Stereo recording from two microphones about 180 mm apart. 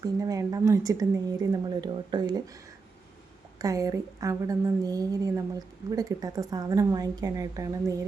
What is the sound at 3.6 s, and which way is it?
A woman's voice, 20° right (ahead or behind).